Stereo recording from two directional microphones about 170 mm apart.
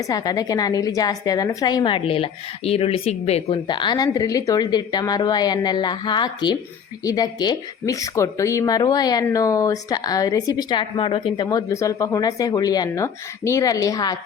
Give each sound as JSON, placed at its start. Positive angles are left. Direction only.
{"t": 0.1, "sound": "speech", "side_deg": 20}